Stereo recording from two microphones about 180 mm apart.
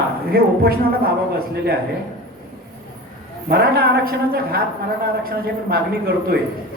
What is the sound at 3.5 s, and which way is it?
A man's voice, 60° right (ahead or behind).